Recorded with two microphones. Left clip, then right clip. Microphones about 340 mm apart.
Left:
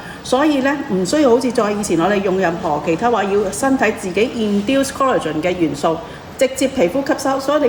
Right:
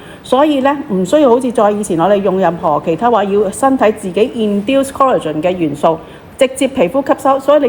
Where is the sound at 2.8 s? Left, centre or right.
Centre.